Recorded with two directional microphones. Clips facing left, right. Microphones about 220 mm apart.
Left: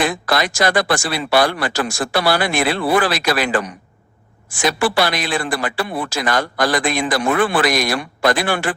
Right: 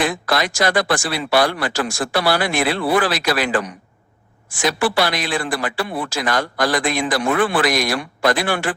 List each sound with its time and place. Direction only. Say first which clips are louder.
0.0 s speech: left 1 dB; 50° left (ahead or behind)
4.6 s speech: left 1 dB; 55° left (ahead or behind)